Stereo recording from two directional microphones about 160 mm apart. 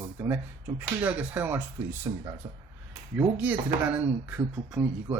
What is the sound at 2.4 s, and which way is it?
Speech, 30° right (ahead or behind).